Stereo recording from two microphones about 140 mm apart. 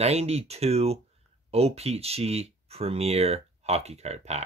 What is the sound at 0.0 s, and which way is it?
Speech, 45° right (ahead or behind).